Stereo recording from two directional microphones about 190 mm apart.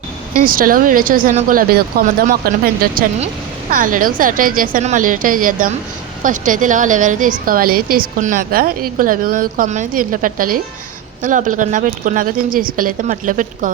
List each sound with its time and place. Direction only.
0.4 s a woman's voice: 45° right (ahead or behind)